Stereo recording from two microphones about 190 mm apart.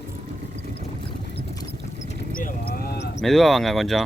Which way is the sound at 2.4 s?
50° left (ahead or behind).